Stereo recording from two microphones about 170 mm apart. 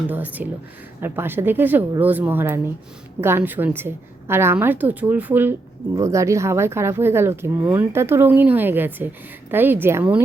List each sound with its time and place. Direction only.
0.1 s a woman's voice: 10° right (ahead or behind)